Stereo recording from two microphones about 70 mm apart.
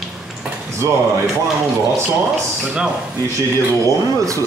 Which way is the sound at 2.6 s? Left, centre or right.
Centre.